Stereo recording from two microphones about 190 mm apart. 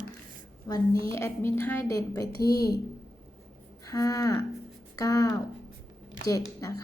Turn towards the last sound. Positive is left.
turn(degrees=15)  # may be behind; listen again after turning